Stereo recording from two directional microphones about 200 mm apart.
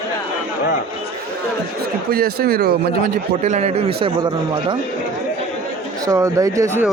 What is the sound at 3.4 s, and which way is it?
Speech, 35° right (ahead or behind).